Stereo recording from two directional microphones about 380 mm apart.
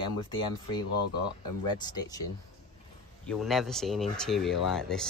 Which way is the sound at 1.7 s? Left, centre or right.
Centre.